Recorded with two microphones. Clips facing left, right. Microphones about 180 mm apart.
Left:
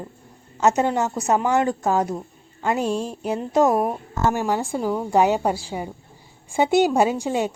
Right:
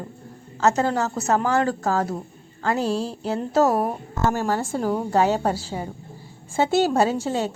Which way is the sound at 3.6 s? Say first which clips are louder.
Left 2 dB; centre (ahead or behind).